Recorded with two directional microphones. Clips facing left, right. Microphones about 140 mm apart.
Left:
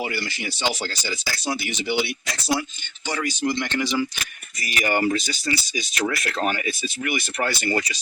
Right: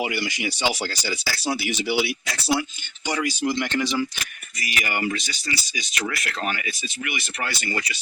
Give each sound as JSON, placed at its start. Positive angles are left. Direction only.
{"t": 0.0, "sound": "speech", "side_deg": -15}
{"t": 4.6, "sound": "speech", "side_deg": 35}